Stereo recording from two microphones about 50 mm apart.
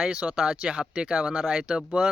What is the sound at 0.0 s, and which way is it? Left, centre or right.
Speech, right.